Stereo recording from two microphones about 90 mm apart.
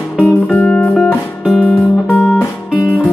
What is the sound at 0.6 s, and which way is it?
Music, 15° left (ahead or behind).